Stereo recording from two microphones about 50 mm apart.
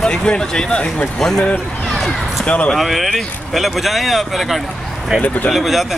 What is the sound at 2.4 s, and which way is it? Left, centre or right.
Speech, left.